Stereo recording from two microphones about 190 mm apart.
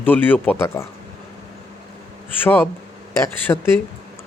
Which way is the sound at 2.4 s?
10° left (ahead or behind).